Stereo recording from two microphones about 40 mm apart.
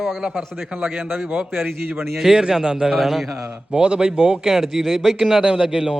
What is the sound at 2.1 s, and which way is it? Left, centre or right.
Speech, centre.